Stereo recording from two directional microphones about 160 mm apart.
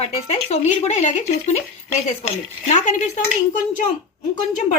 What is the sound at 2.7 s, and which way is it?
Speech, 50° left (ahead or behind).